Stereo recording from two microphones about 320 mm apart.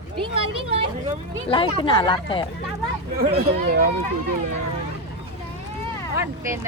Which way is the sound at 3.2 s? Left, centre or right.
Right.